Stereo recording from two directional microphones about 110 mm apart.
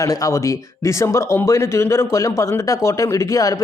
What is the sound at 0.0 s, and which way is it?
Speech, 30° left (ahead or behind).